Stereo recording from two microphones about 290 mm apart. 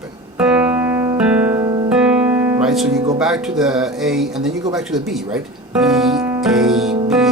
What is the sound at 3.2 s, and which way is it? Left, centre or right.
Speech, centre.